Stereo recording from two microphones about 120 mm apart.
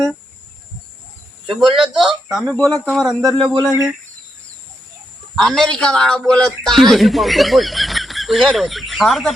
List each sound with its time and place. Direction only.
1.5 s a man's voice: centre (ahead or behind)
5.4 s a man's voice: 5° left (ahead or behind)